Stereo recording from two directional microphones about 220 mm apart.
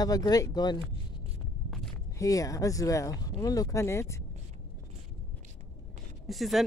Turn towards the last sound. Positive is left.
turn(degrees=0)  # may be behind; listen again after turning